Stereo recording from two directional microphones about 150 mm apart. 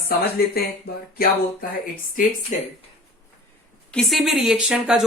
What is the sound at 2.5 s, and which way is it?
Speech, 55° left (ahead or behind).